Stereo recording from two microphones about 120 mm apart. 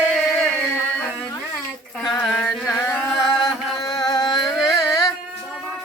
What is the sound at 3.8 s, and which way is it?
Chant, 30° left (ahead or behind).